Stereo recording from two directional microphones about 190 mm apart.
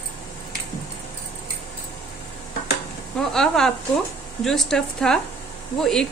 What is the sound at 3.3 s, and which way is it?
Speech, 5° left (ahead or behind).